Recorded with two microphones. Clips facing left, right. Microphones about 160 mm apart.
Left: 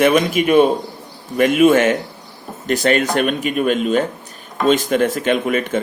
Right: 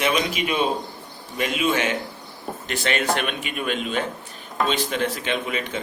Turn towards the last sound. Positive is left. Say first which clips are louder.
# left 9 dB
turn(degrees=50)  # may be behind; listen again after turning